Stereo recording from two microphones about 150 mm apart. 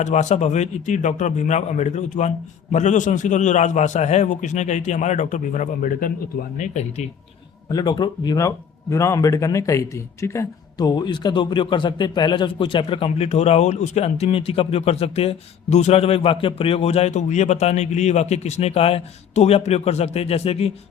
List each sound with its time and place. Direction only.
0.0 s a man's voice: 50° left (ahead or behind)
7.7 s speech: 30° left (ahead or behind)